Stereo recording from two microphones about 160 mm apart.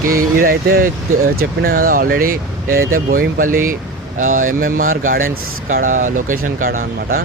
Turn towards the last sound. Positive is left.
turn(degrees=-60)  # may be behind; listen again after turning